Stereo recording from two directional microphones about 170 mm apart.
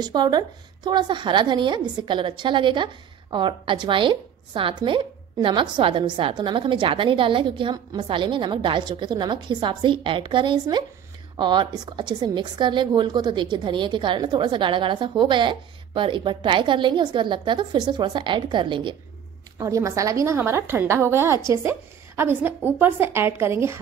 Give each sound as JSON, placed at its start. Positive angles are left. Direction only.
{"t": 0.0, "sound": "a woman's voice", "side_deg": -25}